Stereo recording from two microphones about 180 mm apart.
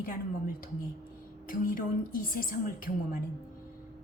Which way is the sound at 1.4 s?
50° left (ahead or behind).